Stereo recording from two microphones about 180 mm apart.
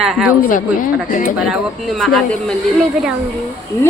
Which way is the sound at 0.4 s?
50° left (ahead or behind).